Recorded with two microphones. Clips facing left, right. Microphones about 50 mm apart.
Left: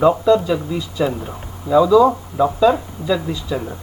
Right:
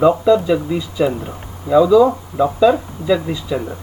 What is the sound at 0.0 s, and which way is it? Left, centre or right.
Speech, centre.